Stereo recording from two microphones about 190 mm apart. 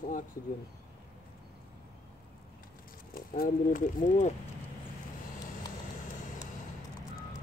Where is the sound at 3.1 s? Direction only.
45° left (ahead or behind).